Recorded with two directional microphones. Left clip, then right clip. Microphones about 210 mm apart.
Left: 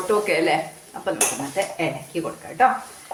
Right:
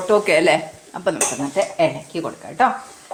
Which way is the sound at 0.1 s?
45° right (ahead or behind).